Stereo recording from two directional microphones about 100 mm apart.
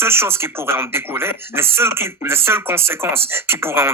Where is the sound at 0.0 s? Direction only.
25° right (ahead or behind).